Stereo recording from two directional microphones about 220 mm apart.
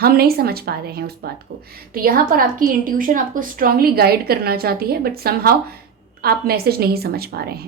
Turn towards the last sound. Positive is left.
turn(degrees=-45)  # may be behind; listen again after turning